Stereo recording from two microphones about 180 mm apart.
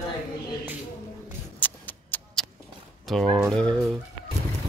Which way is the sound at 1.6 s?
10° left (ahead or behind).